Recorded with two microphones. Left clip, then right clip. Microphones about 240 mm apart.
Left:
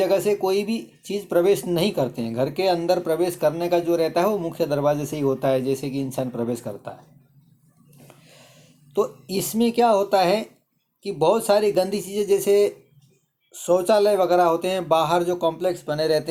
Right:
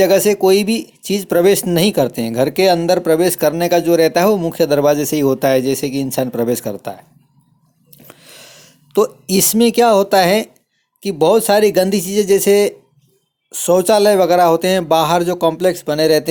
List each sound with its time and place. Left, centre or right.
0.0 s speech: right
8.0 s a sound: right
11.0 s speech: right